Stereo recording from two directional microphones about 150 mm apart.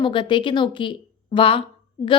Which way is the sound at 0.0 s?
35° left (ahead or behind).